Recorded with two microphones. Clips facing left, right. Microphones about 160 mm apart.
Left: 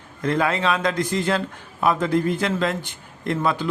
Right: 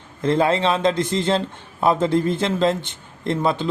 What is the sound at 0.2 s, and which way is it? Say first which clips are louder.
Speech: right 3 dB; 25° right (ahead or behind).